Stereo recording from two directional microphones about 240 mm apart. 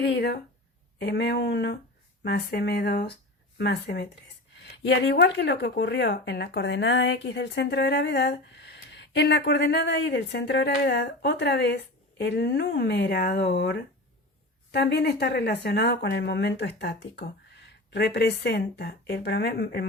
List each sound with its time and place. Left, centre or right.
0.0 s speech: left